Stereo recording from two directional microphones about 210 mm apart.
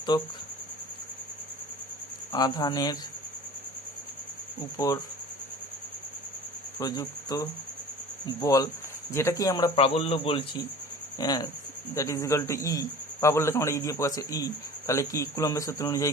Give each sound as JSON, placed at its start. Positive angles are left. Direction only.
{"t": 0.1, "sound": "speech", "side_deg": 20}
{"t": 2.3, "sound": "speech", "side_deg": 20}
{"t": 4.8, "sound": "speech", "side_deg": 20}
{"t": 6.7, "sound": "cricket", "side_deg": 15}
{"t": 8.4, "sound": "speech", "side_deg": 15}